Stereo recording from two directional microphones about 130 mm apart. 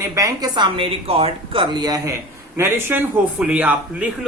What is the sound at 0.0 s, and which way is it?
A woman's voice, 25° right (ahead or behind).